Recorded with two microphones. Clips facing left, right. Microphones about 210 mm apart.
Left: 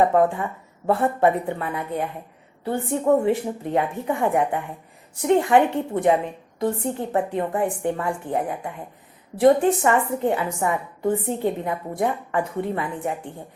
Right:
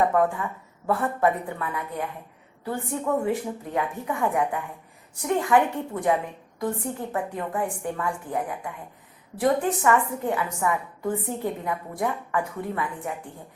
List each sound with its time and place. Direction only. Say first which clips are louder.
0.0 s a woman's voice: left 4 dB; 25° left (ahead or behind)